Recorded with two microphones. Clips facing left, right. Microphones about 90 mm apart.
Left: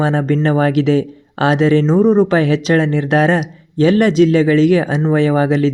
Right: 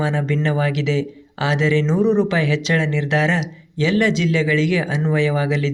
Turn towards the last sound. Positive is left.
turn(degrees=45)  # may be behind; listen again after turning